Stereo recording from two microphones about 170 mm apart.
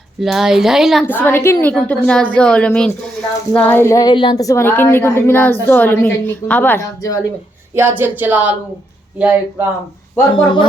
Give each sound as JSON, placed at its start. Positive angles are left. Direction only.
{"t": 0.2, "sound": "speech", "side_deg": 0}
{"t": 1.0, "sound": "a woman's voice", "side_deg": 10}
{"t": 7.8, "sound": "speech", "side_deg": -10}
{"t": 10.3, "sound": "speech", "side_deg": 30}